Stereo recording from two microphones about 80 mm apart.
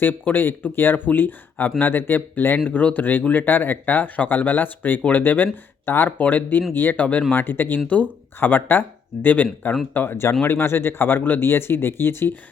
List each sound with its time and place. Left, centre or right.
0.0 s speech: left